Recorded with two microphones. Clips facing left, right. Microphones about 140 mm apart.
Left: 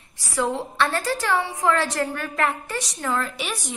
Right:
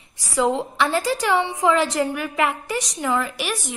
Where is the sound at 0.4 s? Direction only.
15° right (ahead or behind).